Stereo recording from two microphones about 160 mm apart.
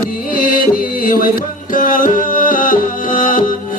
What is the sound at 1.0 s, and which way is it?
Music, 60° left (ahead or behind).